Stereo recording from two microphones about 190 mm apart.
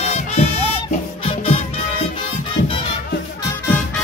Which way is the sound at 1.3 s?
30° left (ahead or behind).